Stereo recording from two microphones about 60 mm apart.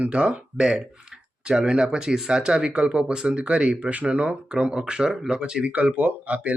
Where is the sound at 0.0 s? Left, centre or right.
Centre.